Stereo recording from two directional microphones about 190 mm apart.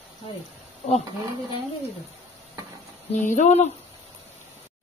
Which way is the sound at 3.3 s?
40° left (ahead or behind).